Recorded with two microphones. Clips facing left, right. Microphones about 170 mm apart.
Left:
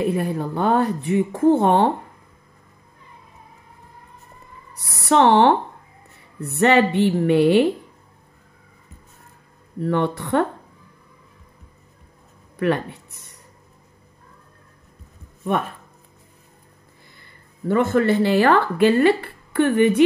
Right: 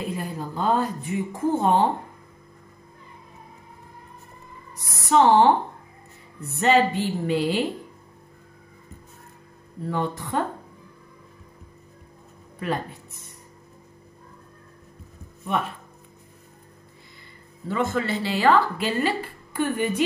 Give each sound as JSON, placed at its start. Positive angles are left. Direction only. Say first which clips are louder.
{"t": 0.0, "sound": "speech", "louder": "left 8 dB", "side_deg": 65}
{"t": 4.7, "sound": "a woman's voice", "louder": "left 2 dB", "side_deg": 65}
{"t": 9.8, "sound": "a woman's voice", "louder": "left 6 dB", "side_deg": 70}
{"t": 12.5, "sound": "speech", "louder": "left 7 dB", "side_deg": 70}
{"t": 15.5, "sound": "speech", "louder": "left 4 dB", "side_deg": 55}
{"t": 17.6, "sound": "speech", "louder": "left 7 dB", "side_deg": 60}